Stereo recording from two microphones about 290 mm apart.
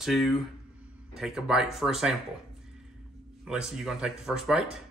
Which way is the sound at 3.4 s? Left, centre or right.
Centre.